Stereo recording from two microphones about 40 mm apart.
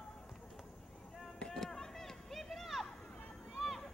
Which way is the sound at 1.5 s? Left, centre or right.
Centre.